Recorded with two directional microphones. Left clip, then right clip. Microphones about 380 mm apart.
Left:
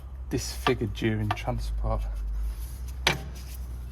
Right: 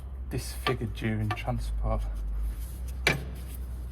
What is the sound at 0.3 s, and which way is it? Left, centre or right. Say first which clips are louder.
Speech: left 4 dB; left.